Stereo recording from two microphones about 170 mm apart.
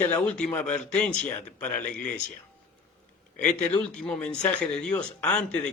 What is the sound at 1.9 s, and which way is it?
Speech, 50° left (ahead or behind).